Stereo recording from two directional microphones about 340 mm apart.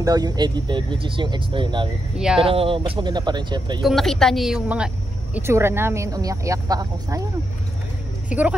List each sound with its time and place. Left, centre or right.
0.0 s a woman's voice: centre
2.1 s speech: centre
2.4 s a woman's voice: centre
3.8 s a woman's voice: centre
8.3 s speech: centre